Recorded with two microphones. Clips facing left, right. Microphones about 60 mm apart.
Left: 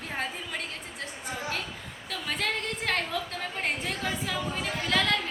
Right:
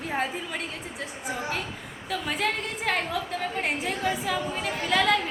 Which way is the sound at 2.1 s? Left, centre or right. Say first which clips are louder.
Right 3 dB; centre.